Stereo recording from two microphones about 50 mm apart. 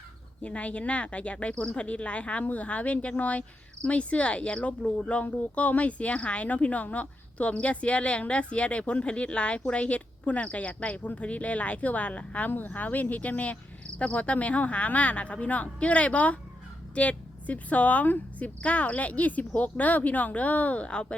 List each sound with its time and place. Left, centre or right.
0.4 s speech: left
12.5 s speech: left